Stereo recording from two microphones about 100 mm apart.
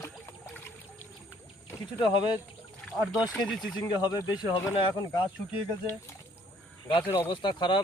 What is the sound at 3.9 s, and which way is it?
Speech, 40° left (ahead or behind).